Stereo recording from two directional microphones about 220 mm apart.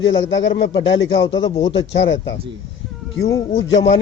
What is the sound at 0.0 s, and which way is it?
Speech, 55° left (ahead or behind).